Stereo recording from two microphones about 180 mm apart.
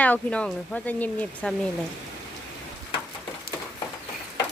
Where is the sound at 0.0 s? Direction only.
5° left (ahead or behind).